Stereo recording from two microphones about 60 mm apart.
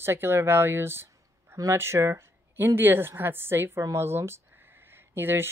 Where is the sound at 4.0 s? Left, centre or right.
Right.